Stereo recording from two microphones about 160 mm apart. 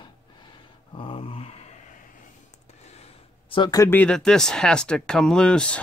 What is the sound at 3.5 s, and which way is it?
Speech, 25° left (ahead or behind).